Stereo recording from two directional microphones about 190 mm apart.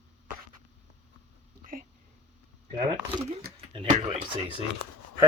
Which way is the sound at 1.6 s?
45° right (ahead or behind).